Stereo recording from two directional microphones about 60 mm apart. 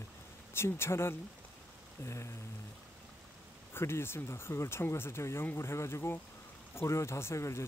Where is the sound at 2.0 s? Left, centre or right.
Left.